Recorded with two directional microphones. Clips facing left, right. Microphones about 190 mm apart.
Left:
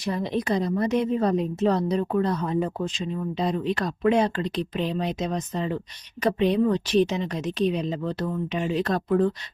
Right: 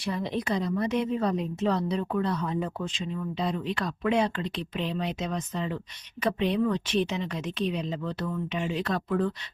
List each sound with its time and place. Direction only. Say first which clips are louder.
0.0 s a woman's voice: left 4 dB; 40° left (ahead or behind)